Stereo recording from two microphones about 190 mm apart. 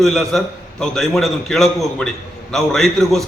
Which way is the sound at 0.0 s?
Centre (ahead or behind).